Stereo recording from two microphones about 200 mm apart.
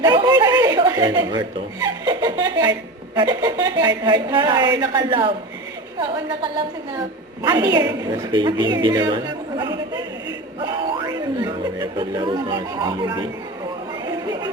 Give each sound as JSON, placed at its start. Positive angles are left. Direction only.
{"t": 0.0, "sound": "a woman's voice", "side_deg": -20}
{"t": 7.4, "sound": "a woman's voice", "side_deg": -20}
{"t": 14.0, "sound": "chatter", "side_deg": -20}